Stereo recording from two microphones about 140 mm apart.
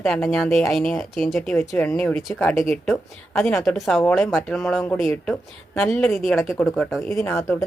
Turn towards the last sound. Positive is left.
turn(degrees=15)  # may be behind; listen again after turning